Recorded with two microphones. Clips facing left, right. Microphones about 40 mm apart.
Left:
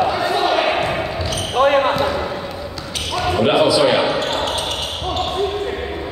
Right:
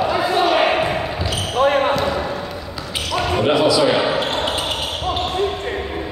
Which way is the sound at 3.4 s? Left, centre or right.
Left.